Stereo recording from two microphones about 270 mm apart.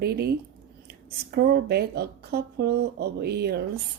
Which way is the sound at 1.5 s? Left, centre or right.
Right.